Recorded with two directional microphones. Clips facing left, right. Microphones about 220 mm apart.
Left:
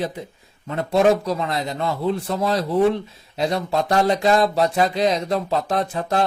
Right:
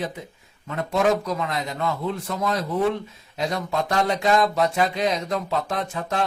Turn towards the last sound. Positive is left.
turn(degrees=35)  # may be behind; listen again after turning